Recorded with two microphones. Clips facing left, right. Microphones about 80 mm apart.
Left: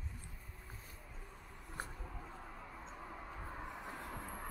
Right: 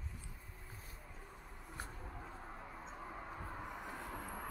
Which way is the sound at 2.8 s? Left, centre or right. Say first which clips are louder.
Right 1 dB; centre.